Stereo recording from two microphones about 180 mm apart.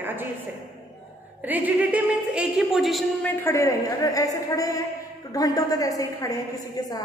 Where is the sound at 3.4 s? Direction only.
15° left (ahead or behind).